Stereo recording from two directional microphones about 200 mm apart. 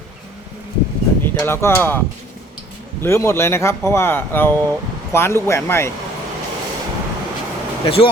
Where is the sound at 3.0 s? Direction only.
10° left (ahead or behind).